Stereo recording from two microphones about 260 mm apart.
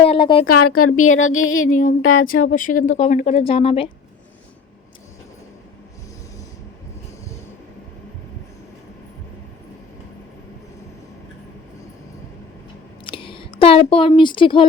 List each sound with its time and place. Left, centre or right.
0.0 s a sound: centre
0.4 s speech: left
1.6 s a woman's voice: left
13.1 s speech: centre